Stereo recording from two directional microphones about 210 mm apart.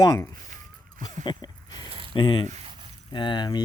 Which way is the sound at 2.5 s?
25° right (ahead or behind).